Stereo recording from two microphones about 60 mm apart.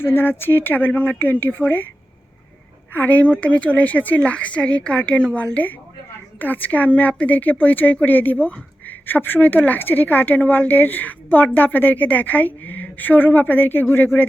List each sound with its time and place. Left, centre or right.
0.0 s speech: left
2.9 s a woman's voice: left